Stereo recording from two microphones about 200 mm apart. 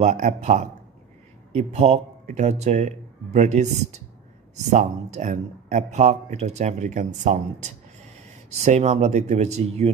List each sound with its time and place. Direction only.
0.0 s speech: 35° right (ahead or behind)